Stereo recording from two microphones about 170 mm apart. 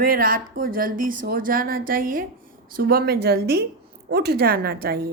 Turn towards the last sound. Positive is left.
turn(degrees=-65)  # may be behind; listen again after turning